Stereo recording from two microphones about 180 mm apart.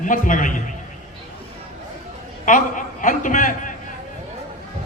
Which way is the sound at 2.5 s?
45° left (ahead or behind).